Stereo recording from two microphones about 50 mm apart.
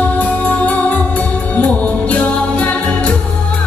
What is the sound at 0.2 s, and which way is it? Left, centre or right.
Music, left.